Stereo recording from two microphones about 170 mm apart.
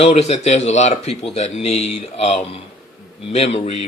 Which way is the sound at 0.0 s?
40° left (ahead or behind).